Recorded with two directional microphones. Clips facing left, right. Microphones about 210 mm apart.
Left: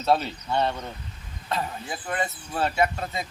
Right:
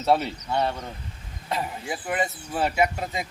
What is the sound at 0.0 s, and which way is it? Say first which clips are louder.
A man's voice: right 1 dB; 15° right (ahead or behind).